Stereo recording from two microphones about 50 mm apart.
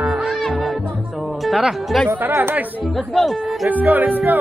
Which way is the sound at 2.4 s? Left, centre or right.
Right.